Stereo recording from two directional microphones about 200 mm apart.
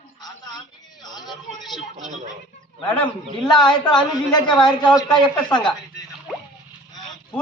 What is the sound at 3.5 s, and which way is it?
A woman's voice, 20° left (ahead or behind).